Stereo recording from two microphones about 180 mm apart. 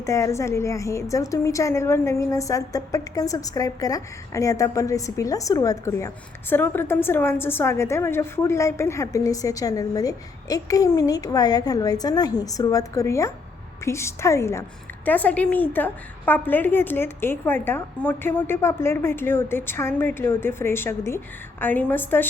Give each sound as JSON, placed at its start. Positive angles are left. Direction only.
{"t": 0.0, "sound": "a woman's voice", "side_deg": 15}